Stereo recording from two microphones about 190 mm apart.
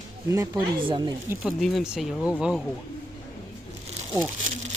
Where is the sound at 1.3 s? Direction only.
Centre (ahead or behind).